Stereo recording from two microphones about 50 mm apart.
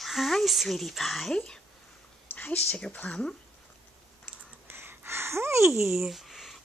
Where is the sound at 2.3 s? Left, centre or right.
Left.